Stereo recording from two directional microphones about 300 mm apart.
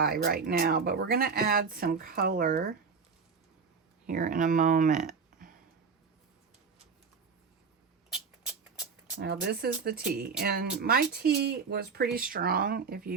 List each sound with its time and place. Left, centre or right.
0.0 s speech: right
4.0 s speech: right
8.1 s a sound: centre
9.2 s speech: right